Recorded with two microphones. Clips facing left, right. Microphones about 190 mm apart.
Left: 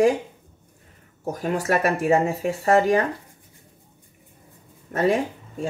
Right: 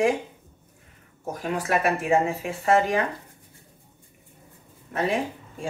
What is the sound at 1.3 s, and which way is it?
Speech, 40° left (ahead or behind).